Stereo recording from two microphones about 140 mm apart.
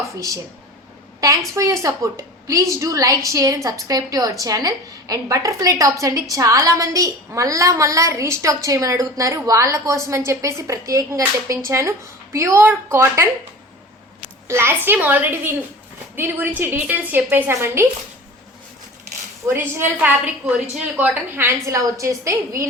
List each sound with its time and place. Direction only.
1.5 s a woman's voice: 25° right (ahead or behind)
14.4 s a woman's voice: 15° right (ahead or behind)
19.5 s a woman's voice: 15° right (ahead or behind)